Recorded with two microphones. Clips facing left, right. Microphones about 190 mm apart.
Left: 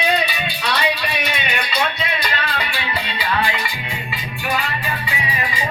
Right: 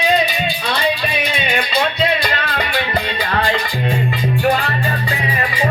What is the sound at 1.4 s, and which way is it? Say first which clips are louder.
Music: right 6 dB; 45° right (ahead or behind).